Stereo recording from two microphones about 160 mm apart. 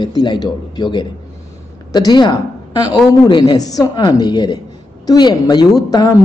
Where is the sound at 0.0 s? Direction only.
30° left (ahead or behind).